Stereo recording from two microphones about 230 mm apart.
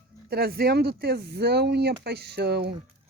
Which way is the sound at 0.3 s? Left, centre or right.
Right.